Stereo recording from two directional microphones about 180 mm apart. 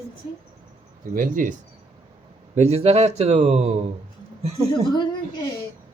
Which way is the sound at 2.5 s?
35° right (ahead or behind).